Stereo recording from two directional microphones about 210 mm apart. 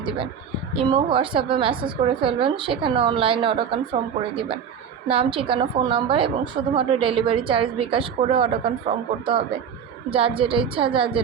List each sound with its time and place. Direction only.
0.0 s a woman's voice: 25° right (ahead or behind)
5.0 s a woman's voice: 25° right (ahead or behind)